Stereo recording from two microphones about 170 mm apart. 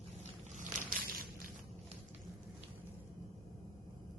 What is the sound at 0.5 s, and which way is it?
Boat, 50° right (ahead or behind).